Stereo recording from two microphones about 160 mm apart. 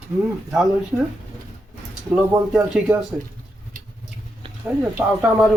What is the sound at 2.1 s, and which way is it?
Speech, 5° right (ahead or behind).